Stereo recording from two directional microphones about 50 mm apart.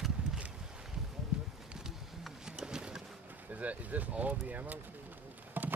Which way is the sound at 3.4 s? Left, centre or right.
Right.